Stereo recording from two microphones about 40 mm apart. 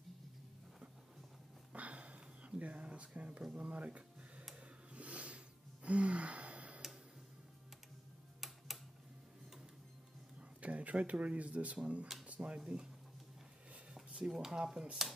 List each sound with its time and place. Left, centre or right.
1.7 s a sound: right
5.9 s gasp: right
10.6 s speech: right
12.3 s a sound: right
12.5 s speech: right
14.3 s speech: centre